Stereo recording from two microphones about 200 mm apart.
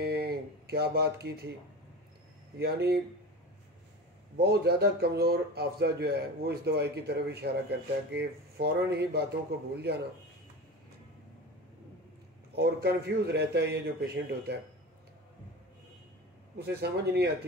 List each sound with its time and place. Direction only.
0.0 s a sound: 50° right (ahead or behind)
2.5 s speech: 55° right (ahead or behind)
4.4 s a man's voice: 50° right (ahead or behind)
12.5 s a man's voice: 55° right (ahead or behind)
16.5 s speech: 55° right (ahead or behind)